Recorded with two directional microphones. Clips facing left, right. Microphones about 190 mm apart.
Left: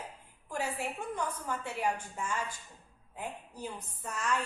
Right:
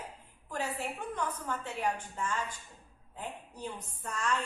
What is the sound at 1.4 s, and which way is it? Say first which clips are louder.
A woman's voice: left 1 dB; 10° left (ahead or behind).